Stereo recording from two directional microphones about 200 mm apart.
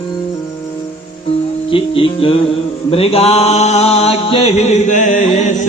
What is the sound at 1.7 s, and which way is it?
Music, 25° left (ahead or behind).